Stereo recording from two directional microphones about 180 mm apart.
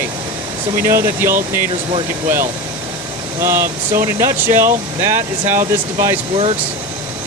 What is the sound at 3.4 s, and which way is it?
Speech, 15° right (ahead or behind).